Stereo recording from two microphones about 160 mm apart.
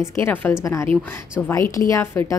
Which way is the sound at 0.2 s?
15° left (ahead or behind).